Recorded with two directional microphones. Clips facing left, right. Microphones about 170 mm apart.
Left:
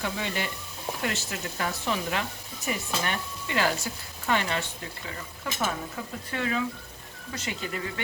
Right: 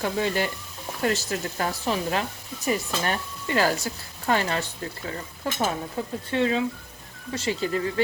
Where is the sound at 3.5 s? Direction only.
40° right (ahead or behind).